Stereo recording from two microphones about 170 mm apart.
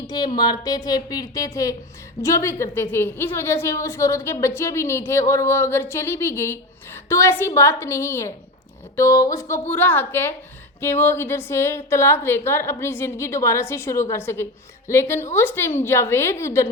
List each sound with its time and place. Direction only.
0.1 s a woman's voice: 25° left (ahead or behind)